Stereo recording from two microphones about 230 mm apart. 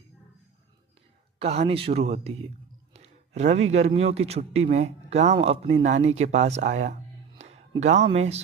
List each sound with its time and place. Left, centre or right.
1.4 s speech: right
2.9 s a sound: right
3.7 s speech: right